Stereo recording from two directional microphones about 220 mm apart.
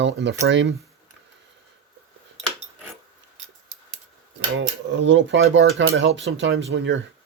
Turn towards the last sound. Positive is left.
turn(degrees=-55)  # may be behind; listen again after turning